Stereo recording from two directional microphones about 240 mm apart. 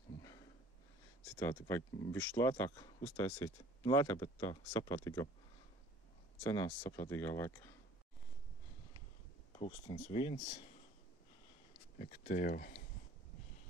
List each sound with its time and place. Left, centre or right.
1.4 s speech: centre
6.4 s speech: centre
9.6 s speech: left
12.0 s speech: left